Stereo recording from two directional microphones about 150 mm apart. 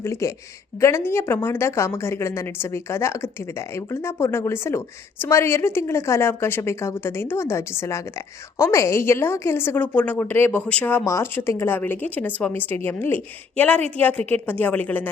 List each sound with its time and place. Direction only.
0.0 s a woman's voice: 20° left (ahead or behind)